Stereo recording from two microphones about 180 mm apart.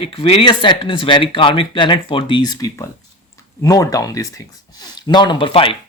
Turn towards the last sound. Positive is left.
turn(degrees=30)  # may be behind; listen again after turning